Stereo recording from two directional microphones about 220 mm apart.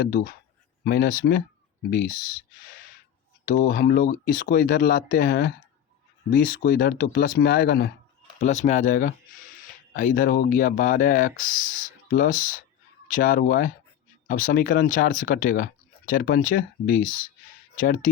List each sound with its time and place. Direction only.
0.1 s speech: 40° left (ahead or behind)
3.5 s speech: 40° left (ahead or behind)
8.4 s speech: 30° left (ahead or behind)